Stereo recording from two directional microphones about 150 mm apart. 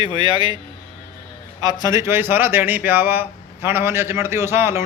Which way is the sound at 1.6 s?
25° right (ahead or behind).